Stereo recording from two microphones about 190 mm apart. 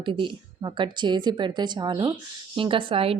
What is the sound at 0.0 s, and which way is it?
A woman's voice, 25° right (ahead or behind).